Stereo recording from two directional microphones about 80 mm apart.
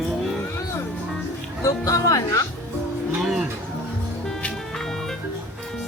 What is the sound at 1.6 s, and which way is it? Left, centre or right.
Speech, left.